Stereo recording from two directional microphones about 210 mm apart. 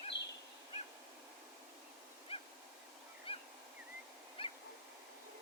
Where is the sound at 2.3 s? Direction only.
30° left (ahead or behind).